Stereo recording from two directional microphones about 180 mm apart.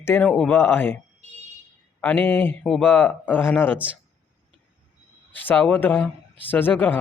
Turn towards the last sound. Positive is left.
turn(degrees=10)  # may be behind; listen again after turning